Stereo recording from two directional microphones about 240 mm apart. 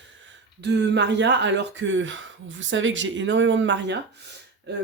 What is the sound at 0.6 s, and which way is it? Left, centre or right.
Speech, right.